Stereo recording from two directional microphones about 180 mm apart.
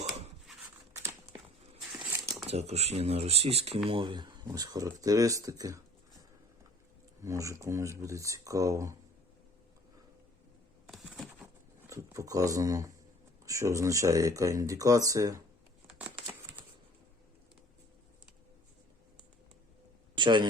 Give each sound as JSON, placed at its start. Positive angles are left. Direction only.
{"t": 2.5, "sound": "speech", "side_deg": -35}
{"t": 7.2, "sound": "speech", "side_deg": -15}
{"t": 10.8, "sound": "a sound", "side_deg": -5}
{"t": 11.9, "sound": "speech", "side_deg": -15}
{"t": 16.0, "sound": "a sound", "side_deg": -10}
{"t": 20.1, "sound": "a man's voice", "side_deg": -25}